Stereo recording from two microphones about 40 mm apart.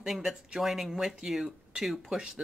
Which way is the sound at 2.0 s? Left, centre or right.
Right.